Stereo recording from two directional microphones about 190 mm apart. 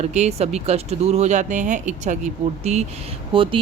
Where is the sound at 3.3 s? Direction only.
25° right (ahead or behind).